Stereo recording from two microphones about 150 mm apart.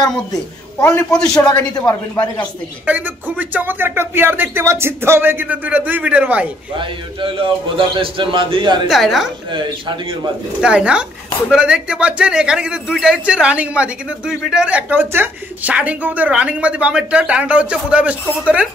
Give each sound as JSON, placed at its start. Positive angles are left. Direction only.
{"t": 0.7, "sound": "speech", "side_deg": 20}
{"t": 1.1, "sound": "a man's voice", "side_deg": 5}
{"t": 1.7, "sound": "speech", "side_deg": 30}
{"t": 2.8, "sound": "a man's voice", "side_deg": -10}
{"t": 6.8, "sound": "a man's voice", "side_deg": -35}
{"t": 8.8, "sound": "a woman's voice", "side_deg": 0}
{"t": 9.5, "sound": "a man's voice", "side_deg": -30}
{"t": 10.6, "sound": "a man's voice", "side_deg": -5}